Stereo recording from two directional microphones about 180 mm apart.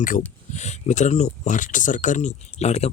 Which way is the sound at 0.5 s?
40° left (ahead or behind).